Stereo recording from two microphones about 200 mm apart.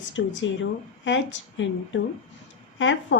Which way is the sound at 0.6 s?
65° left (ahead or behind).